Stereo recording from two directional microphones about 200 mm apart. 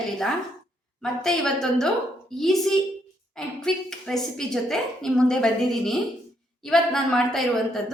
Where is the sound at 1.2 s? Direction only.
Centre (ahead or behind).